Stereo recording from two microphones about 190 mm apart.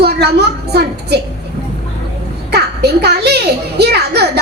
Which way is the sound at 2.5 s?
60° right (ahead or behind).